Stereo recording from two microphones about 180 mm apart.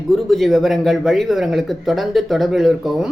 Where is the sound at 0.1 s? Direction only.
Centre (ahead or behind).